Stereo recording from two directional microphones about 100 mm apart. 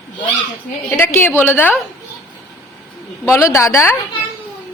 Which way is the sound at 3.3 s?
25° left (ahead or behind).